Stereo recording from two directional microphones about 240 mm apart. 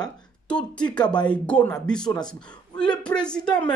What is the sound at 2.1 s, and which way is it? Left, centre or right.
Speech, centre.